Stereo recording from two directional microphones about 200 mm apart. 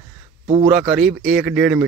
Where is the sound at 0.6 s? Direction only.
5° right (ahead or behind).